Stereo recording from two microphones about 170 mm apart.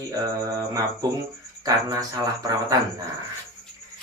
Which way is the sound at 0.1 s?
20° right (ahead or behind).